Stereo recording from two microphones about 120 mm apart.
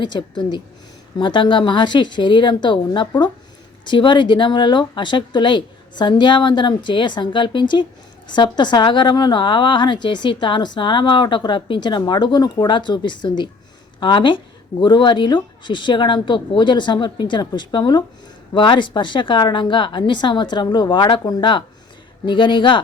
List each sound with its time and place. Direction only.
0.0 s a woman's voice: 40° left (ahead or behind)